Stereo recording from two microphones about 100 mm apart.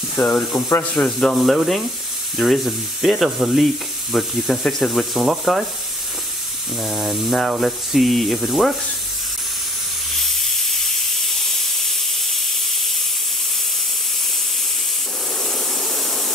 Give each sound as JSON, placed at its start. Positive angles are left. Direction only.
{"t": 0.1, "sound": "speech", "side_deg": 10}
{"t": 0.5, "sound": "speech", "side_deg": 25}
{"t": 0.9, "sound": "sizzle", "side_deg": 5}
{"t": 6.8, "sound": "sizzle", "side_deg": 0}
{"t": 10.2, "sound": "steam", "side_deg": 0}